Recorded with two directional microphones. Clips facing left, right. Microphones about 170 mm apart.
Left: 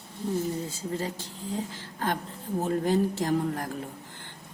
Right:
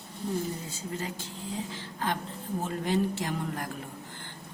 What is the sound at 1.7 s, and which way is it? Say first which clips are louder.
A woman's voice: left 2 dB; 45° left (ahead or behind).